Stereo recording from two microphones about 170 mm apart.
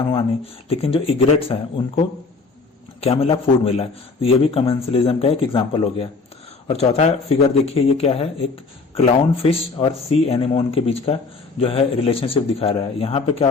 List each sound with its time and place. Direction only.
0.7 s a man's voice: 35° left (ahead or behind)